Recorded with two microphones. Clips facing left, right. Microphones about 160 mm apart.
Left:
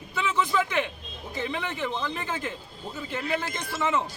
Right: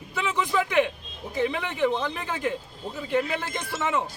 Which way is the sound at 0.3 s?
15° right (ahead or behind).